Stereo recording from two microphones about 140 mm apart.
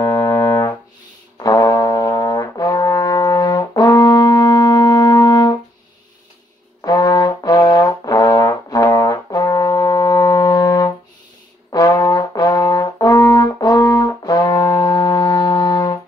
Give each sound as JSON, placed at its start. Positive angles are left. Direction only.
{"t": 0.0, "sound": "brass instrument", "side_deg": 25}
{"t": 6.8, "sound": "brass instrument", "side_deg": 25}